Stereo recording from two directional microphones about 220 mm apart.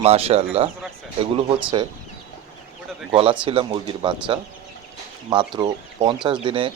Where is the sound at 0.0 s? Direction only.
25° right (ahead or behind).